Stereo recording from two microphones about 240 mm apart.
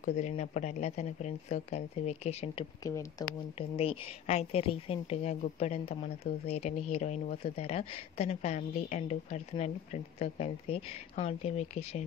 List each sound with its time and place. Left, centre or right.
0.0 s speech: left
2.8 s speech: centre
3.5 s speech: left